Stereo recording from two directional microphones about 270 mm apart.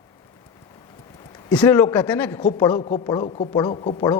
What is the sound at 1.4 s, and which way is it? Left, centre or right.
A man's voice, centre.